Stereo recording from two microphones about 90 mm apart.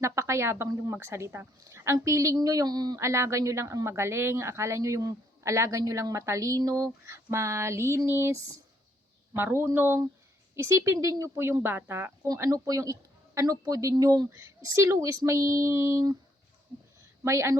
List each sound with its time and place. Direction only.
0.0 s speech: 30° right (ahead or behind); by 3.0 s 50° right (ahead or behind)
3.0 s speech: 35° right (ahead or behind)
12.3 s speech: 40° right (ahead or behind)
14.3 s speech: 30° right (ahead or behind)
17.2 s speech: 30° right (ahead or behind)